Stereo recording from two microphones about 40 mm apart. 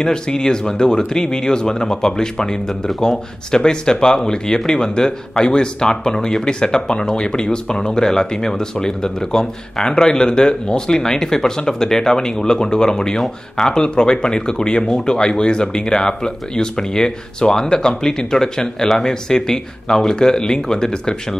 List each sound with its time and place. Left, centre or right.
0.0 s speech: centre